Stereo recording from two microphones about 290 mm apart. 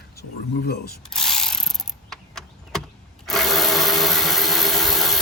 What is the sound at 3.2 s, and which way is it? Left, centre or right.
Tools, centre.